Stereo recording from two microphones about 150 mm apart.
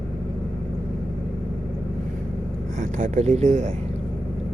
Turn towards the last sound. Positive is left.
turn(degrees=-50)  # may be behind; listen again after turning